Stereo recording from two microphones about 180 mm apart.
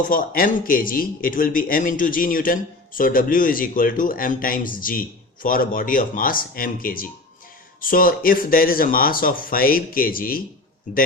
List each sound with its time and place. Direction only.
0.1 s speech: 50° left (ahead or behind)